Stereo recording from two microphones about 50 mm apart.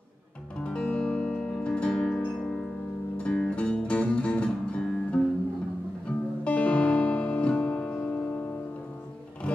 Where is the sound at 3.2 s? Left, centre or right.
Left.